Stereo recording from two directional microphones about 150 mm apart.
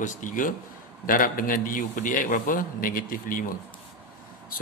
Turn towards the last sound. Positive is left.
turn(degrees=70)  # may be behind; listen again after turning